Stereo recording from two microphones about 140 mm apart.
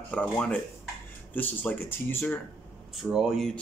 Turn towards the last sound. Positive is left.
turn(degrees=0)  # may be behind; listen again after turning